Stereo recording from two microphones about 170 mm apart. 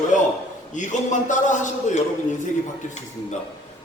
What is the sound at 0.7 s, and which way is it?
Speech, 45° left (ahead or behind).